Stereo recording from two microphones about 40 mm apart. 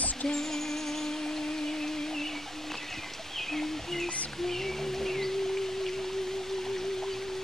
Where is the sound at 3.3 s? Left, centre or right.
Centre.